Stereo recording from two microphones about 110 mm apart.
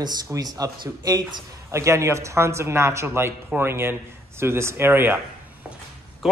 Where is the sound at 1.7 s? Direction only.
25° right (ahead or behind).